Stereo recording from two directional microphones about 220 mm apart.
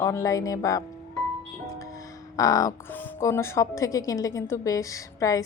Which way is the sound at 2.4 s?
15° left (ahead or behind).